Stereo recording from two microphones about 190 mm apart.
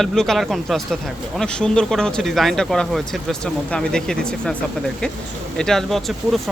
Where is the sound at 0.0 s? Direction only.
Centre (ahead or behind).